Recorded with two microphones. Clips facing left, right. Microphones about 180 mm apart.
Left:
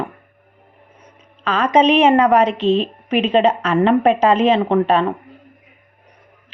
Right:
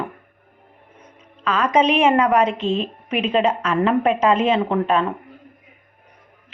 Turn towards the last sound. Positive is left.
turn(degrees=30)  # may be behind; listen again after turning